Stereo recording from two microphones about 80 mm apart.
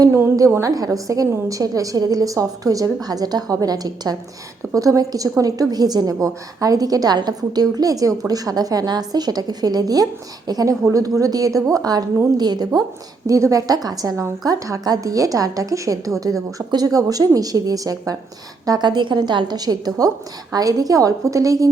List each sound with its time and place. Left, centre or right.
0.1 s a woman's voice: right
13.2 s a woman's voice: right